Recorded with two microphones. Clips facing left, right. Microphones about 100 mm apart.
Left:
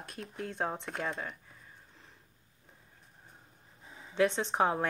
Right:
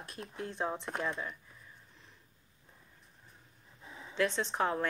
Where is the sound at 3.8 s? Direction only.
35° right (ahead or behind).